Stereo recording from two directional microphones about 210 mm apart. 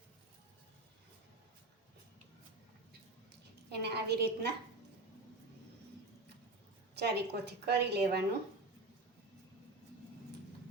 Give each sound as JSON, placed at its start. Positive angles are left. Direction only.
{"t": 3.7, "sound": "a woman's voice", "side_deg": -50}
{"t": 6.9, "sound": "a woman's voice", "side_deg": -50}